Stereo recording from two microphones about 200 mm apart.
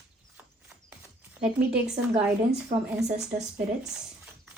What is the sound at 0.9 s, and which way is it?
Speech, 5° right (ahead or behind).